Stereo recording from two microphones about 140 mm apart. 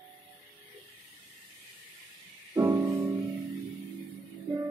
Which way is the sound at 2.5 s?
20° right (ahead or behind).